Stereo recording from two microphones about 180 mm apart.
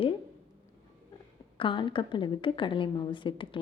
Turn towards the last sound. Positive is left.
turn(degrees=30)  # may be behind; listen again after turning